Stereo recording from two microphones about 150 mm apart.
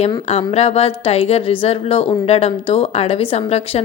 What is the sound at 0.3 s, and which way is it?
A woman's voice, 45° left (ahead or behind).